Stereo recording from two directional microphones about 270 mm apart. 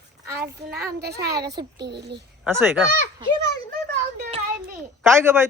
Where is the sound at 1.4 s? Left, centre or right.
Centre.